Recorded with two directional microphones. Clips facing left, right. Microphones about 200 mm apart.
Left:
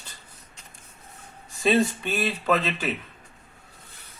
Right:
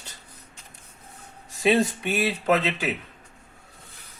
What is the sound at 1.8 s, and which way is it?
Speech, 15° right (ahead or behind).